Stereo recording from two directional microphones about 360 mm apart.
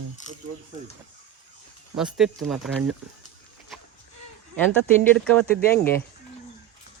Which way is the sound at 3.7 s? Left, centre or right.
Centre.